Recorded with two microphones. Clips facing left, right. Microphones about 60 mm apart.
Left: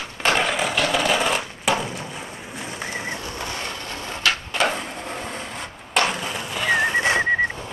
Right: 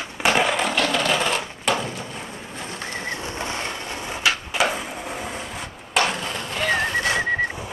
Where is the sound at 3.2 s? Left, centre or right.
Right; by 7.2 s left.